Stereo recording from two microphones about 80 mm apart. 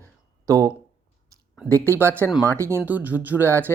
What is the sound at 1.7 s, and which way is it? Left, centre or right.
Speech, right.